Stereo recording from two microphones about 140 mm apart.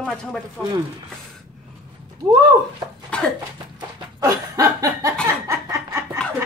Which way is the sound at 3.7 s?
25° right (ahead or behind).